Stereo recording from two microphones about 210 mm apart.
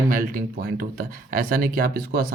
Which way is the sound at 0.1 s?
40° right (ahead or behind).